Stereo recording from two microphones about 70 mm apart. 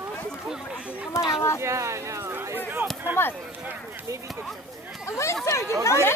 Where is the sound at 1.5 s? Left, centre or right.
Right.